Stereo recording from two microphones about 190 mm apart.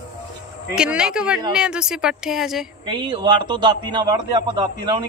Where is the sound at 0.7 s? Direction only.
5° right (ahead or behind).